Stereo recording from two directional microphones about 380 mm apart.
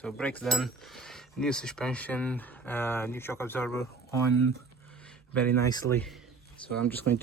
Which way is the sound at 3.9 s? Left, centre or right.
Left.